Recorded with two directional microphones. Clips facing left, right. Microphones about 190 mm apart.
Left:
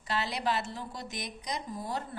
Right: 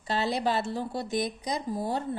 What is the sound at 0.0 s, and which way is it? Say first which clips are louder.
A woman's voice: right 5 dB; 30° right (ahead or behind).